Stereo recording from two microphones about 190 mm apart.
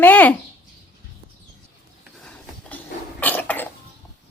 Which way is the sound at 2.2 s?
5° left (ahead or behind).